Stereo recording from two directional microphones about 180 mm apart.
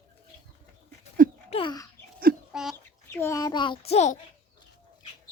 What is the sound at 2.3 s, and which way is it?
Bird, 60° right (ahead or behind).